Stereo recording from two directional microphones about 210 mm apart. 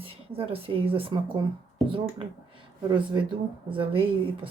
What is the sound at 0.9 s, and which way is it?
Speech, 25° right (ahead or behind).